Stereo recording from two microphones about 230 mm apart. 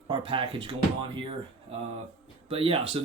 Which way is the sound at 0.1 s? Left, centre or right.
Right.